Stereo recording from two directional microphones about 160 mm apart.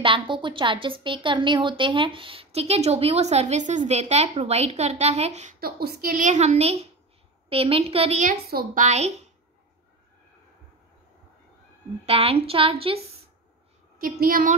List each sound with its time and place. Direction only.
0.0 s a woman's voice: 30° right (ahead or behind); by 5.6 s 45° right (ahead or behind)
5.6 s a woman's voice: 75° right (ahead or behind); by 8.3 s 40° right (ahead or behind)
8.3 s a woman's voice: 65° right (ahead or behind)
8.8 s a woman's voice: 45° right (ahead or behind)
12.1 s a woman's voice: 35° right (ahead or behind)
13.9 s a woman's voice: 65° right (ahead or behind)